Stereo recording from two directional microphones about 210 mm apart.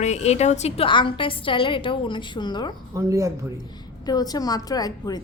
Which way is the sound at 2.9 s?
15° right (ahead or behind).